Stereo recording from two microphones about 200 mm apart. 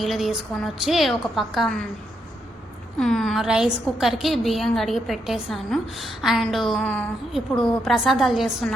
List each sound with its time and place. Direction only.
0.0 s a woman's voice: centre (ahead or behind)
3.0 s a woman's voice: centre (ahead or behind)